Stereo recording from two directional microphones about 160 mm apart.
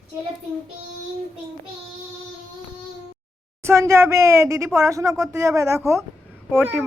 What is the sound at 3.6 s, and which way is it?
A woman's voice, 15° right (ahead or behind).